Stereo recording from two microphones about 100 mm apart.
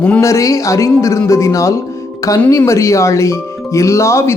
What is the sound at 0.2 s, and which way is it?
Speech, 30° left (ahead or behind).